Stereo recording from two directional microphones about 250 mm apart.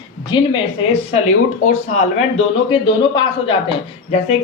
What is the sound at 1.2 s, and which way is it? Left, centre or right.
Speech, left.